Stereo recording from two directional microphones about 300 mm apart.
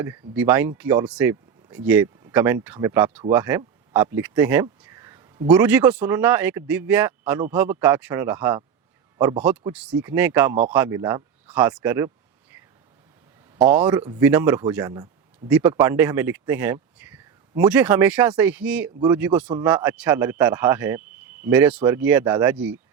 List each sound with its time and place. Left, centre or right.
0.3 s speech: centre